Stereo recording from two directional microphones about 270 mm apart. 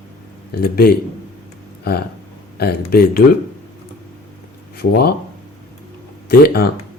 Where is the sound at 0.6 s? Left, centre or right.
Left.